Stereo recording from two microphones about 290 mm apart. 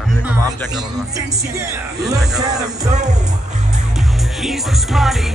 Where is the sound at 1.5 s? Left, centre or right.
Centre.